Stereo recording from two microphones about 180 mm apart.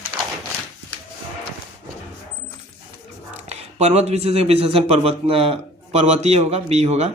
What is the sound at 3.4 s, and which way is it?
Speech, 40° right (ahead or behind).